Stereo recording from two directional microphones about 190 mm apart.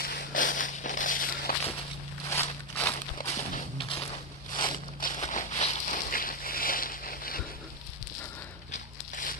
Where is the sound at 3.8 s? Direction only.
30° left (ahead or behind).